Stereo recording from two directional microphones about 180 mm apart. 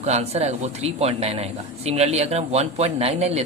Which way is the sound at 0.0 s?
35° right (ahead or behind).